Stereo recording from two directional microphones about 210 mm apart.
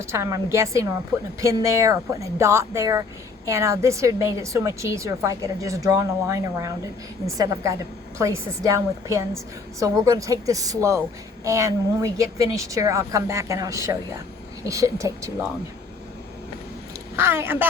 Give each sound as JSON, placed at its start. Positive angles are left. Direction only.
{"t": 0.0, "sound": "speech", "side_deg": -10}
{"t": 17.2, "sound": "speech", "side_deg": -10}